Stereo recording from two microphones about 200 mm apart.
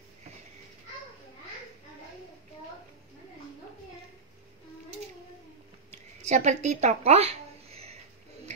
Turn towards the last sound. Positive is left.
turn(degrees=-30)  # may be behind; listen again after turning